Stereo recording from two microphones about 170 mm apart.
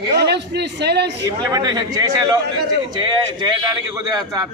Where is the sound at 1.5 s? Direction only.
20° right (ahead or behind).